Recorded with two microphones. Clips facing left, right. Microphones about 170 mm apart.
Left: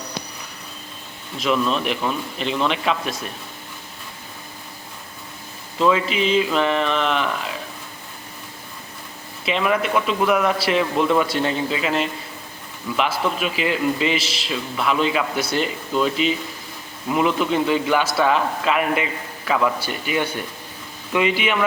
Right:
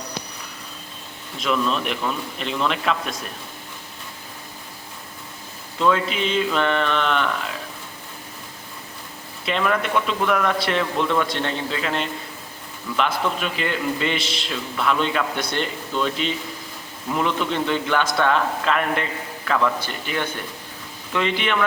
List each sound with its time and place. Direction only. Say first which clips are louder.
1.4 s a man's voice: left 2 dB; centre (ahead or behind)
5.8 s a man's voice: left 2 dB; 5° left (ahead or behind)
9.5 s a man's voice: left 2 dB; 5° left (ahead or behind)